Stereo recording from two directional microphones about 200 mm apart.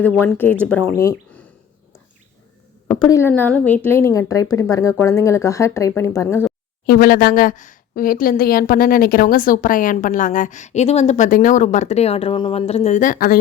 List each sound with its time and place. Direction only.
0.0 s speech: 10° left (ahead or behind)
2.8 s a woman's voice: 15° left (ahead or behind)
6.8 s a woman's voice: 45° left (ahead or behind)